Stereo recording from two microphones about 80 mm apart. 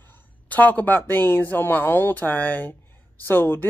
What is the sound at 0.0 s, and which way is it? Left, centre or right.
Speech, left.